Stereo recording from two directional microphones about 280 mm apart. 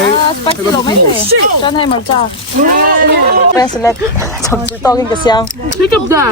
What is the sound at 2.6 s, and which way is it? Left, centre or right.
Speech, right.